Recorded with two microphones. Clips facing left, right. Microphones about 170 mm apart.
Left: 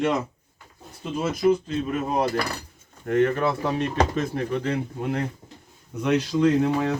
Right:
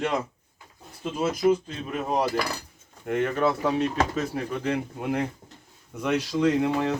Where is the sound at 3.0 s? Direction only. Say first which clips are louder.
Left 3 dB; 10° right (ahead or behind).